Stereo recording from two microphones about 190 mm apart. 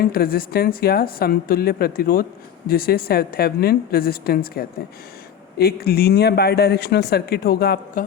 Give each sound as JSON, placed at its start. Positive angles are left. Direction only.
{"t": 0.0, "sound": "a woman's voice", "side_deg": 50}